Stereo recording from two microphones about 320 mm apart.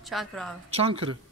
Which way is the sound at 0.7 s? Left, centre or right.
Centre.